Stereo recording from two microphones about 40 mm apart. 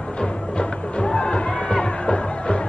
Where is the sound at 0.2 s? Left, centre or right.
Left.